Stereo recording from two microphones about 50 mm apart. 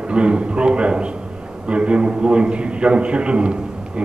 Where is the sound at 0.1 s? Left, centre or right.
Right.